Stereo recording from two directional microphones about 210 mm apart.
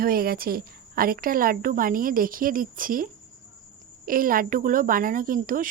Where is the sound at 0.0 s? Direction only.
45° right (ahead or behind).